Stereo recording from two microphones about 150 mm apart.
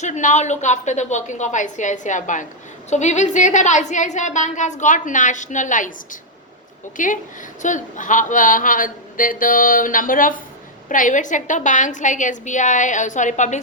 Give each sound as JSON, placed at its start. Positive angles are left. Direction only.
{"t": 0.0, "sound": "a woman's voice", "side_deg": 55}
{"t": 6.9, "sound": "a woman's voice", "side_deg": 60}